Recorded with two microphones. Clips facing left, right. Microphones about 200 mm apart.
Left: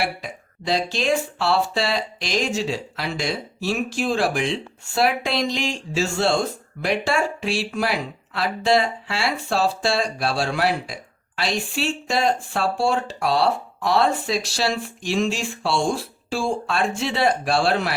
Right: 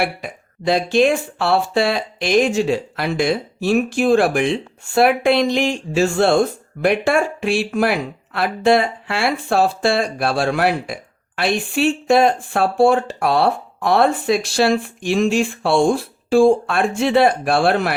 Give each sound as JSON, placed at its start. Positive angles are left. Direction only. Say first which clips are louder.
{"t": 0.0, "sound": "speech", "louder": "right 4 dB", "side_deg": -55}